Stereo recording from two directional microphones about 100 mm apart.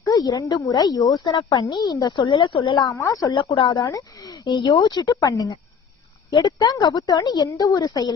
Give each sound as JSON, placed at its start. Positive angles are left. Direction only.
{"t": 0.0, "sound": "speech", "side_deg": 40}
{"t": 2.7, "sound": "a woman's voice", "side_deg": 35}
{"t": 3.3, "sound": "speech", "side_deg": 50}
{"t": 3.8, "sound": "a woman's voice", "side_deg": 35}